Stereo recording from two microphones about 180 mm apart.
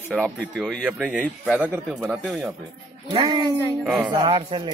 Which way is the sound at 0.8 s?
5° right (ahead or behind).